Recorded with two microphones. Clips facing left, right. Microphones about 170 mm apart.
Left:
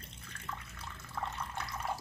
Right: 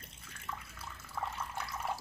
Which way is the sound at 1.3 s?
5° right (ahead or behind).